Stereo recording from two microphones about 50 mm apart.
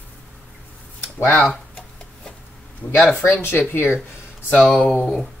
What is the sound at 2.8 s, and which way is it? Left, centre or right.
Speech, left.